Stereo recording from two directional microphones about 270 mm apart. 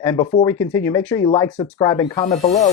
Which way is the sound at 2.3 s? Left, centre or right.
Left.